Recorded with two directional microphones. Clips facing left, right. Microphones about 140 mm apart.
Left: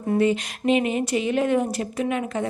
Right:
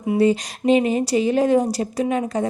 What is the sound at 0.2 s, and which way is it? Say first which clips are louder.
A woman's voice: right 5 dB; 35° right (ahead or behind).